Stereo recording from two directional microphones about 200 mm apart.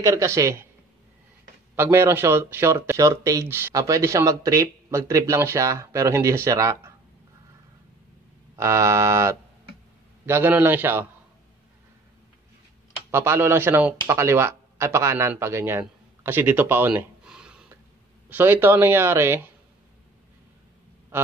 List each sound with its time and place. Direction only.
0.0 s speech: 15° right (ahead or behind)
1.8 s speech: 15° right (ahead or behind)
8.5 s speech: 15° right (ahead or behind)
13.1 s speech: 10° right (ahead or behind)